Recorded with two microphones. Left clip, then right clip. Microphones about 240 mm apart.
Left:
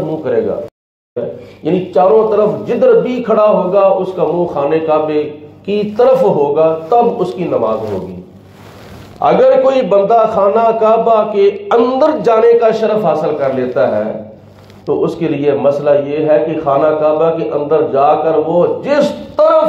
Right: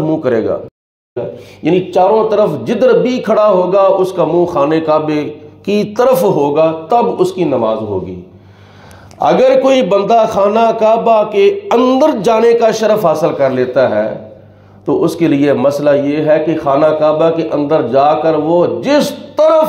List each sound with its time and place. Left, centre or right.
0.3 s a man's voice: right
1.6 s a man's voice: right
9.2 s a man's voice: right
15.0 s a man's voice: right